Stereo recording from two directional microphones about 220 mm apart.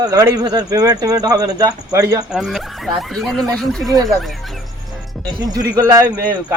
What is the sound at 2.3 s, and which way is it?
Speech, centre (ahead or behind).